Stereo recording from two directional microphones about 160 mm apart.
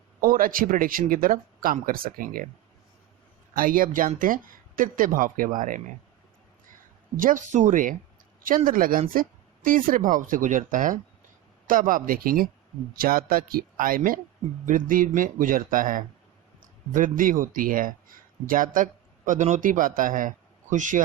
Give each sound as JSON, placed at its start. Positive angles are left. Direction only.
{"t": 0.2, "sound": "speech", "side_deg": -60}
{"t": 3.5, "sound": "speech", "side_deg": -60}
{"t": 7.2, "sound": "a man's voice", "side_deg": -55}